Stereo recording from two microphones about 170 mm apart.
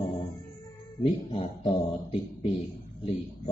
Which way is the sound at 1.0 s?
30° left (ahead or behind).